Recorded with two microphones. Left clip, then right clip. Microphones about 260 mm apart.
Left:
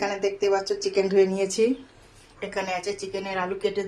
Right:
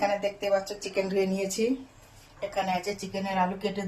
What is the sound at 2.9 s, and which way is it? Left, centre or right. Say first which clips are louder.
Speech: left 3 dB; centre.